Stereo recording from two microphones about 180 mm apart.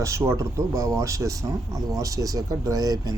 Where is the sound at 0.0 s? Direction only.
15° right (ahead or behind).